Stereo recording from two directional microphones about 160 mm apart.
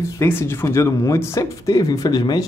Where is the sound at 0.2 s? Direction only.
15° left (ahead or behind).